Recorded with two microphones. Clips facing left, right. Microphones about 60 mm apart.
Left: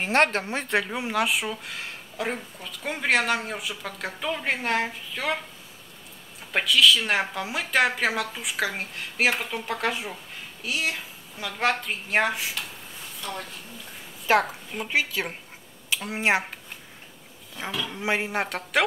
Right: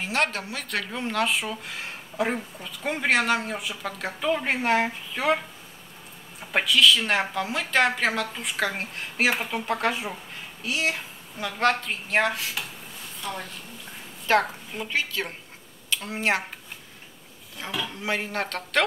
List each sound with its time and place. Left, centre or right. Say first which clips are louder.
0.0 s a woman's voice: left 4 dB; left
0.7 s a woman's voice: left 1 dB; centre
6.5 s a woman's voice: even; centre
12.6 s speech: right 1 dB; centre
14.2 s a woman's voice: even; centre
17.6 s speech: left 1 dB; centre